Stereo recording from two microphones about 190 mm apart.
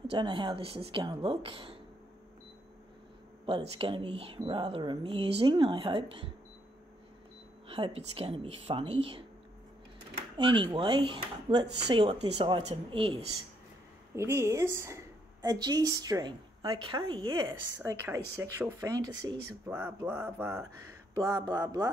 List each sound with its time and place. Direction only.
0.0 s speech: 25° right (ahead or behind)
3.4 s speech: 30° right (ahead or behind)
7.7 s speech: 30° right (ahead or behind)
10.3 s speech: 25° right (ahead or behind)
14.1 s a woman's voice: 15° right (ahead or behind)